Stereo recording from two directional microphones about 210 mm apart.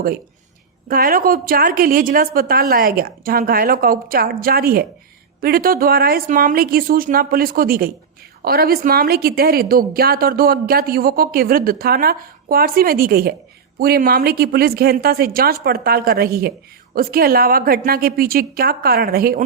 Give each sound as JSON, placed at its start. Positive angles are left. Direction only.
{"t": 0.9, "sound": "a woman's voice", "side_deg": -45}